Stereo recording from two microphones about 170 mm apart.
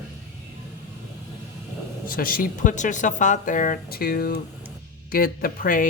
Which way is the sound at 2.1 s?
60° left (ahead or behind).